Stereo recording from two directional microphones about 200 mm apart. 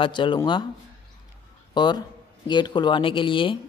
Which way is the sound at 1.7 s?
20° left (ahead or behind).